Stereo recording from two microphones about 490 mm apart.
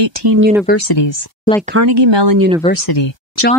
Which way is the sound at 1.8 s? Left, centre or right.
Right.